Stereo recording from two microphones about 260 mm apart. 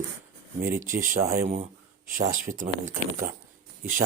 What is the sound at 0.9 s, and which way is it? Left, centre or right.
Speech, right.